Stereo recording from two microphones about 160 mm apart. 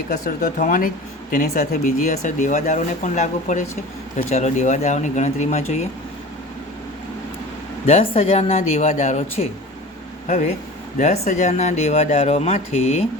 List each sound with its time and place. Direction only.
0.1 s speech: 55° left (ahead or behind)
7.9 s a woman's voice: 35° left (ahead or behind)